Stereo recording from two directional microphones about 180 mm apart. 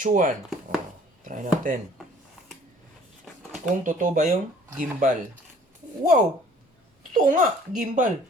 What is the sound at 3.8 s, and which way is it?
Speech, 45° right (ahead or behind).